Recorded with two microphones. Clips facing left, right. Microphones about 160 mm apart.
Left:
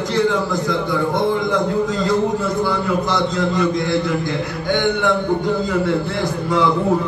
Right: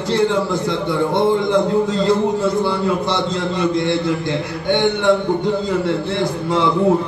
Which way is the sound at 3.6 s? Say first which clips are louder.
Right 3 dB; 25° right (ahead or behind).